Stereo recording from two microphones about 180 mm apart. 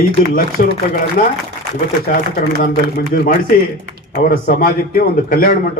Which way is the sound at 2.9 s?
55° left (ahead or behind).